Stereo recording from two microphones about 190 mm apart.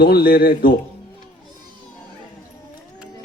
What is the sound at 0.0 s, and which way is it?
Speech, 55° left (ahead or behind).